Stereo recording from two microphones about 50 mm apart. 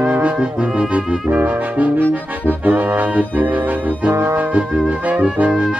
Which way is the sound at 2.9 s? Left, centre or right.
Right.